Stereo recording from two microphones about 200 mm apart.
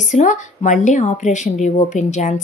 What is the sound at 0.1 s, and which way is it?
Speech, 40° left (ahead or behind).